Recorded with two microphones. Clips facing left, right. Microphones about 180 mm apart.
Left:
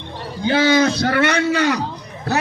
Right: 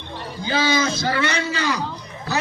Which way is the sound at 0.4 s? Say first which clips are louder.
Left 6 dB; 65° left (ahead or behind).